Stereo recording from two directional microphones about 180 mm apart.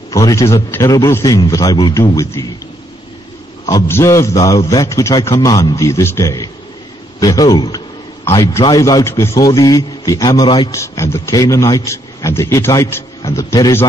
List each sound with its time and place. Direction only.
0.1 s a man's voice: 20° left (ahead or behind)
3.6 s a man's voice: 15° left (ahead or behind)